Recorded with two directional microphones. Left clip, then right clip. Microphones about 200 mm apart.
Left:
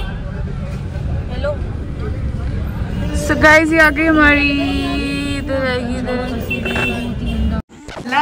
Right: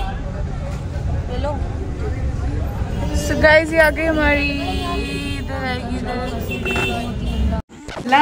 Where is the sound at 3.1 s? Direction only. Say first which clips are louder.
Left 3 dB; 20° left (ahead or behind).